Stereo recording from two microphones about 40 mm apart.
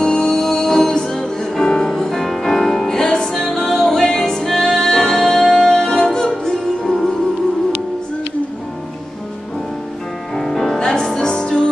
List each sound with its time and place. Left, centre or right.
0.0 s music: centre
3.3 s music: centre
3.8 s music: centre
4.5 s music: centre
10.3 s music: centre
10.8 s music: centre